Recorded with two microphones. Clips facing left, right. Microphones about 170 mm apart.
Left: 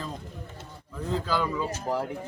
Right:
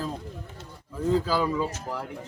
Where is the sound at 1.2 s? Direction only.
5° right (ahead or behind).